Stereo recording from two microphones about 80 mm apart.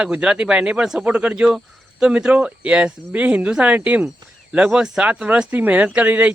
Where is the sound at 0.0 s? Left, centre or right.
Centre.